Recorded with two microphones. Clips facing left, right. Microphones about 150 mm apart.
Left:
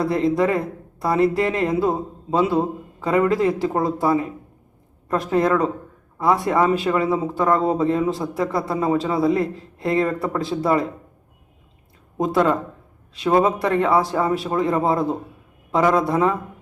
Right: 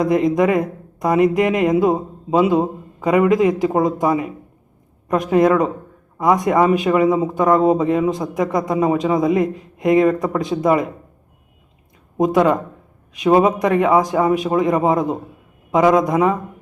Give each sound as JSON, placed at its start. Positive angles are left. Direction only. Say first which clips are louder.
{"t": 0.0, "sound": "speech", "louder": "right 3 dB", "side_deg": -15}
{"t": 12.1, "sound": "speech", "louder": "right 4 dB", "side_deg": -15}